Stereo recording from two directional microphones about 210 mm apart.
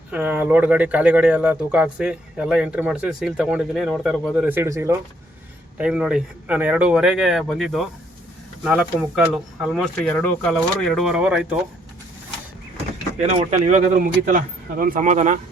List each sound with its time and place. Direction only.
0.1 s speech: 5° right (ahead or behind)
13.1 s speech: 30° right (ahead or behind)